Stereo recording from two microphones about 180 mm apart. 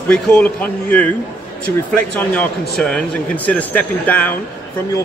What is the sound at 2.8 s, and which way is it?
Speech, 5° left (ahead or behind).